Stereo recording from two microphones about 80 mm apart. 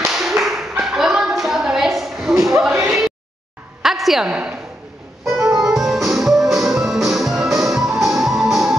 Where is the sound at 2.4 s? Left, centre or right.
Right.